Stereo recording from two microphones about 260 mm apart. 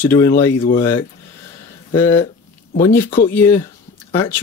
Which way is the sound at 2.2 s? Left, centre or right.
Left.